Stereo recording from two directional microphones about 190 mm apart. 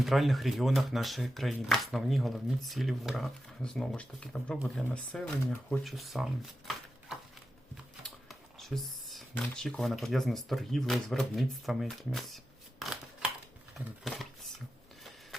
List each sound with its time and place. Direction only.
0.0 s speech: centre (ahead or behind)
8.0 s computer keyboard: centre (ahead or behind)
9.6 s speech: centre (ahead or behind)
13.7 s speech: centre (ahead or behind)